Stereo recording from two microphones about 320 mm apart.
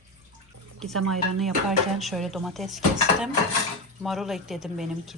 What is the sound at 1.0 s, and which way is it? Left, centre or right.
Speech, right.